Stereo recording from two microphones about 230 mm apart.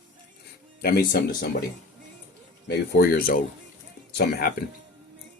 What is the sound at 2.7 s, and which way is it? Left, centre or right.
Speech, left.